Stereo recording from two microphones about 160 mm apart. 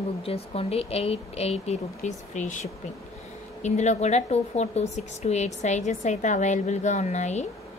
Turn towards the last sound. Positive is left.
turn(degrees=45)  # may be behind; listen again after turning